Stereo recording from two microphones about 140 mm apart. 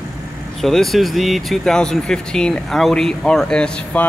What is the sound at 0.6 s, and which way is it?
Speech, centre (ahead or behind).